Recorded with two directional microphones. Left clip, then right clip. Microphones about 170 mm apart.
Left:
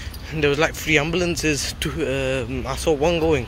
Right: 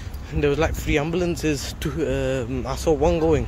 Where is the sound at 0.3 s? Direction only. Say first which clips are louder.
Left 2 dB; 10° right (ahead or behind).